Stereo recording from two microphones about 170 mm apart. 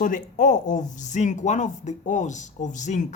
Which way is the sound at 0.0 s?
50° left (ahead or behind).